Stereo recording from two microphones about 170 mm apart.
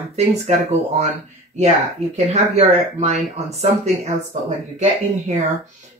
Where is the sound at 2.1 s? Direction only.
40° right (ahead or behind).